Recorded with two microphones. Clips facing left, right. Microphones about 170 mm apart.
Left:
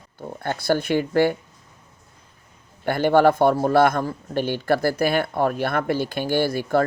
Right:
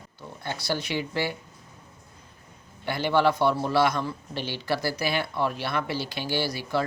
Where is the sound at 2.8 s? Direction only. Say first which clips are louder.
Left 6 dB; 50° left (ahead or behind).